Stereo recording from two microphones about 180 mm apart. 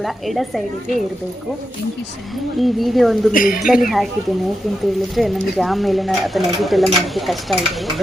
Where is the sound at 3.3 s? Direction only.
50° left (ahead or behind).